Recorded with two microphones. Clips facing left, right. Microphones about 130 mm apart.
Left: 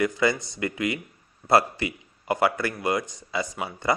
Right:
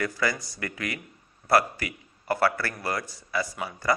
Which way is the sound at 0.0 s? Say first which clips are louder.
Left 5 dB; 25° left (ahead or behind).